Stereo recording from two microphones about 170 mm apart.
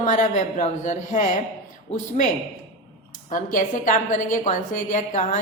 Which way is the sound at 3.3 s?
50° left (ahead or behind).